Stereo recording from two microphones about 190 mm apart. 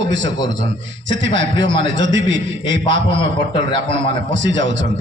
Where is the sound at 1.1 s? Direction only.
75° right (ahead or behind).